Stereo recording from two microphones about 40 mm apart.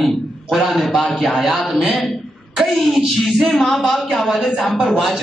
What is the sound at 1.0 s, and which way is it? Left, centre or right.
Speech, centre.